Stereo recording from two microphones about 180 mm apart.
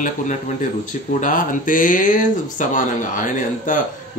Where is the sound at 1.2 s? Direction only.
45° left (ahead or behind).